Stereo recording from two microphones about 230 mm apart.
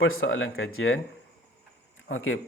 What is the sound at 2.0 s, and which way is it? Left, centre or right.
Speech, left.